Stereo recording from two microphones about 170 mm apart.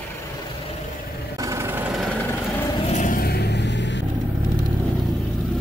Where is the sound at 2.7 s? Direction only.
35° left (ahead or behind).